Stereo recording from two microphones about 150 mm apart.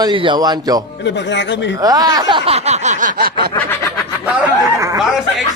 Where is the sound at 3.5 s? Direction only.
10° left (ahead or behind).